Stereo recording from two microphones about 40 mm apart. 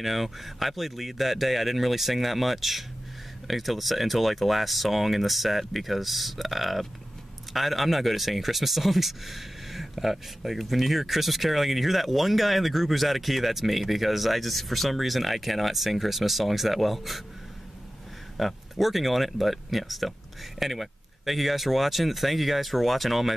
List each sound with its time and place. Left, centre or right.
0.0 s speech: centre
18.4 s speech: centre